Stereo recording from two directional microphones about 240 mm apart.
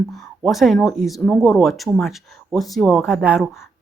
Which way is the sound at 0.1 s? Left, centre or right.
Centre.